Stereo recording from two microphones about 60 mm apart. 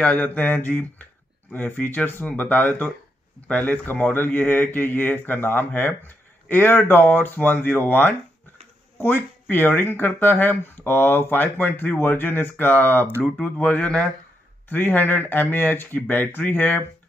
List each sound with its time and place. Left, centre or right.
0.0 s mantra: left
1.5 s speech: left
13.2 s mantra: left
14.7 s speech: left